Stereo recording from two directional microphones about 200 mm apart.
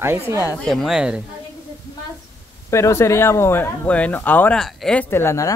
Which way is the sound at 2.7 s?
15° left (ahead or behind).